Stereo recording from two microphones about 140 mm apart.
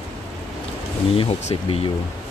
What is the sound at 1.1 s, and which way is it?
Speech, 40° left (ahead or behind).